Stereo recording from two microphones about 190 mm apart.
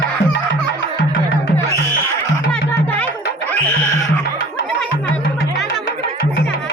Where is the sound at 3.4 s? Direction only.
10° left (ahead or behind).